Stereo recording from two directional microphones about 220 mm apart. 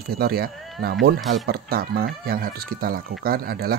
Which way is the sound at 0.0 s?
45° right (ahead or behind).